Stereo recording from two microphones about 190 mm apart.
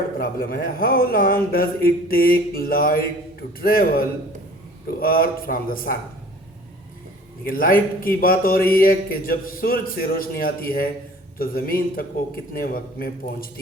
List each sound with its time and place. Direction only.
0.2 s a man's voice: 50° left (ahead or behind)
7.4 s a man's voice: 50° left (ahead or behind)